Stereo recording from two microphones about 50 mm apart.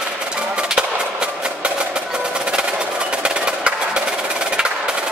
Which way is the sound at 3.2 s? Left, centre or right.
Right.